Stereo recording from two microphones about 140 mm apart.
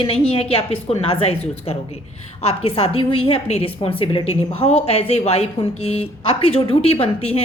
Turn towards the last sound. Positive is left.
turn(degrees=45)  # may be behind; listen again after turning